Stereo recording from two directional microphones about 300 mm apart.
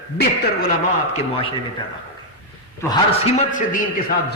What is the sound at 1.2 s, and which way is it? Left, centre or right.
A man's voice, centre.